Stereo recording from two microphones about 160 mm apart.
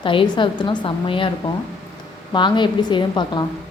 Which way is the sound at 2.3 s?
30° left (ahead or behind).